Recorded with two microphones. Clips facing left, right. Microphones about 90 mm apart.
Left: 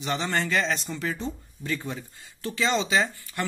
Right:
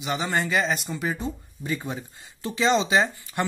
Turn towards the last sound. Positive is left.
turn(degrees=-20)  # may be behind; listen again after turning